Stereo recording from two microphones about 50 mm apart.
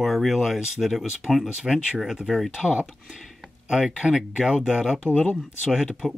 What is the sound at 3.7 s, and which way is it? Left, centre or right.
Speech, centre.